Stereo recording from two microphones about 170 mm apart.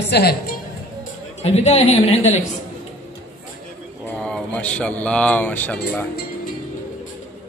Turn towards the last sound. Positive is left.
turn(degrees=10)  # may be behind; listen again after turning